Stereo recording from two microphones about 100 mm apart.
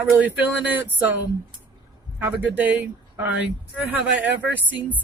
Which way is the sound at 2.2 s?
15° right (ahead or behind).